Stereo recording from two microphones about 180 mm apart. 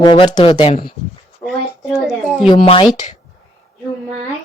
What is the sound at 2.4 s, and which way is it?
Speech, 30° left (ahead or behind).